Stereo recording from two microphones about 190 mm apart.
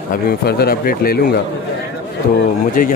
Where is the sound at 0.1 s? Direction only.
50° left (ahead or behind).